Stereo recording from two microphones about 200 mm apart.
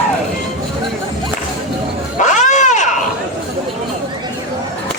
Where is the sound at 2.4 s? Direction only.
35° left (ahead or behind).